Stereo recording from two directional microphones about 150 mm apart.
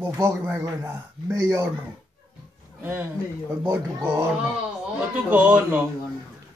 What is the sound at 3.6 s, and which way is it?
Speech, 20° right (ahead or behind).